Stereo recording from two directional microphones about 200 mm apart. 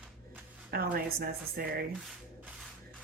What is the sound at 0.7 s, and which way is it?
Speech, 50° right (ahead or behind).